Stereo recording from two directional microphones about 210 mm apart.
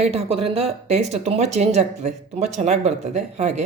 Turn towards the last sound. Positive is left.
turn(degrees=-30)  # may be behind; listen again after turning